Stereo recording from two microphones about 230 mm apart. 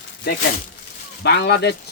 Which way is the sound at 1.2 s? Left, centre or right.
Left.